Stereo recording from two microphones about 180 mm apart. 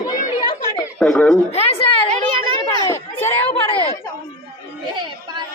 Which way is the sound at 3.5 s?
30° left (ahead or behind).